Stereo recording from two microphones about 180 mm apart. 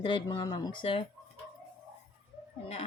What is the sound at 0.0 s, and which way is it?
Speech, 30° left (ahead or behind).